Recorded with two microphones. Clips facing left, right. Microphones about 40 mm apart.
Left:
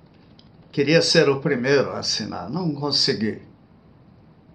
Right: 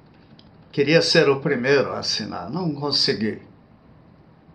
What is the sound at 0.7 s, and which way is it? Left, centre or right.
Speech, centre.